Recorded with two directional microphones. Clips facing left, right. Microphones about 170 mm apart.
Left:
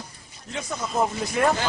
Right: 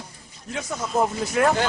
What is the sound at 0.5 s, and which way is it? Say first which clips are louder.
Speech: right 2 dB; centre (ahead or behind).